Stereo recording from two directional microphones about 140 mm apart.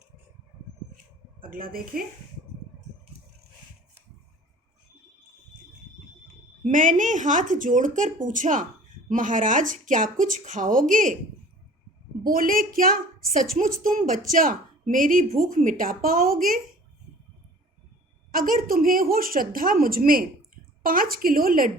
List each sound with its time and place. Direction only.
1.4 s a woman's voice: 90° right
6.7 s speech: 65° right (ahead or behind)
12.2 s a woman's voice: 90° right
13.6 s speech: 75° right (ahead or behind)
18.3 s a woman's voice: 80° right